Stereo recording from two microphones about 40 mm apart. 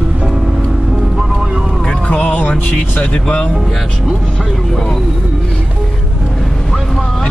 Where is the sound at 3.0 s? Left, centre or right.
Left.